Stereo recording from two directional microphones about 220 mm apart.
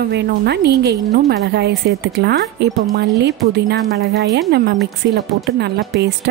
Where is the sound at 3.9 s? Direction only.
45° right (ahead or behind).